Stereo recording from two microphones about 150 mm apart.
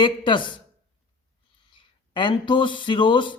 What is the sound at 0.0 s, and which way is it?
Speech, 30° left (ahead or behind).